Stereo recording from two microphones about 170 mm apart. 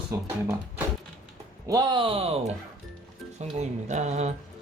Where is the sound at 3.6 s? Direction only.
40° right (ahead or behind).